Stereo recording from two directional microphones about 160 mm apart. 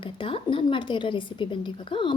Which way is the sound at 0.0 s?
35° left (ahead or behind).